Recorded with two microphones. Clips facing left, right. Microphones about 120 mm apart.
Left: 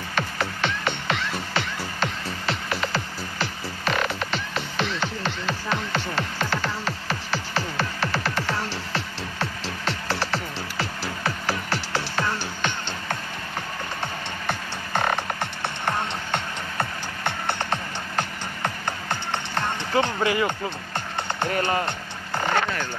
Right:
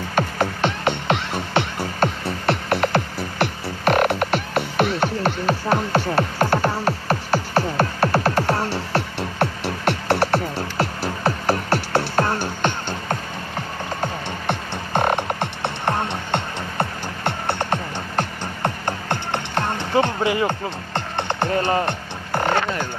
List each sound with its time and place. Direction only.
0.1 s music: 45° right (ahead or behind); by 10.9 s 60° right (ahead or behind)
11.2 s music: 35° right (ahead or behind)
11.7 s music: 55° right (ahead or behind)
14.5 s music: 25° right (ahead or behind)
18.9 s music: 55° right (ahead or behind)
19.5 s music: 25° right (ahead or behind)
21.2 s music: 20° right (ahead or behind)
21.8 s a sound: 55° right (ahead or behind)